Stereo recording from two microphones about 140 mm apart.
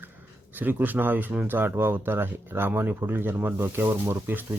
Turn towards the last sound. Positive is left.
turn(degrees=-15)  # may be behind; listen again after turning